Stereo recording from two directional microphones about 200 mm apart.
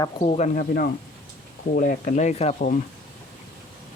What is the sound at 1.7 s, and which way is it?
Speech, 40° left (ahead or behind).